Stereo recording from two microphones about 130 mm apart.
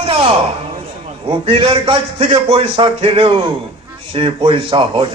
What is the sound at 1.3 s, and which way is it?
A man's voice, 45° right (ahead or behind).